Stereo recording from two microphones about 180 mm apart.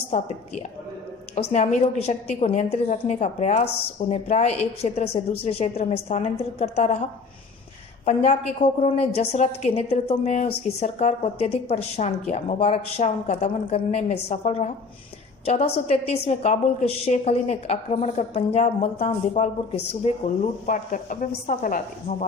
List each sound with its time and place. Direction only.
0.1 s a woman's voice: 35° left (ahead or behind)
8.0 s a woman's voice: 35° left (ahead or behind)
19.7 s speech: 70° left (ahead or behind)
20.4 s a woman's voice: 45° left (ahead or behind)